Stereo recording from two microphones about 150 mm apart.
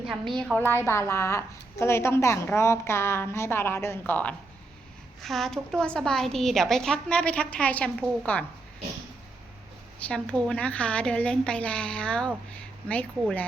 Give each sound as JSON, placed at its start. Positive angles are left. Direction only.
{"t": 0.1, "sound": "a woman's voice", "side_deg": 0}
{"t": 0.6, "sound": "a woman's voice", "side_deg": 15}
{"t": 10.0, "sound": "a woman's voice", "side_deg": 5}